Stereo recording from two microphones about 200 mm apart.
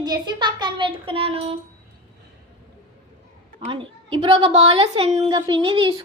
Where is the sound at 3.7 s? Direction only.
25° right (ahead or behind).